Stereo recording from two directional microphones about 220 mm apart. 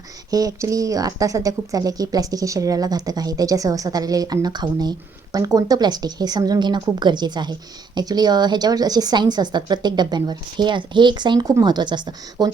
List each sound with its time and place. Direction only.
0.3 s a woman's voice: 15° right (ahead or behind)